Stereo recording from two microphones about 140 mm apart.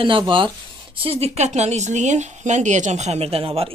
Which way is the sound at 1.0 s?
45° right (ahead or behind).